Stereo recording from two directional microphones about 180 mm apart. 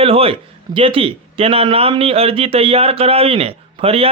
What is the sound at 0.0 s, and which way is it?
Speech, 30° right (ahead or behind).